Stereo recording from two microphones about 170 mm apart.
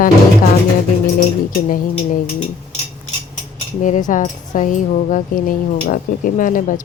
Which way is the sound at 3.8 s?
50° left (ahead or behind).